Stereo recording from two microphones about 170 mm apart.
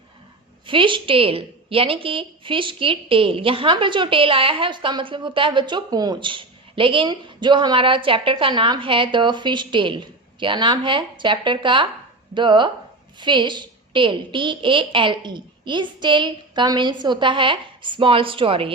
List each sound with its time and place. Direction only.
0.7 s a woman's voice: 30° right (ahead or behind)